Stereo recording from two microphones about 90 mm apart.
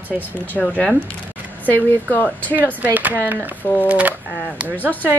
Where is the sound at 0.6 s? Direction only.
5° left (ahead or behind).